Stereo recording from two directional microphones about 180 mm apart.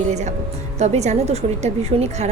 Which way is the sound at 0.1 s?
40° right (ahead or behind).